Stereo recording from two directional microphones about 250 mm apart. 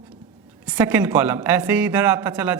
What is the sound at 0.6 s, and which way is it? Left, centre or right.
A man's voice, centre.